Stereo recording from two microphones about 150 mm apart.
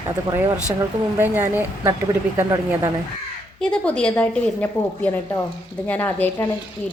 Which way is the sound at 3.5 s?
5° left (ahead or behind).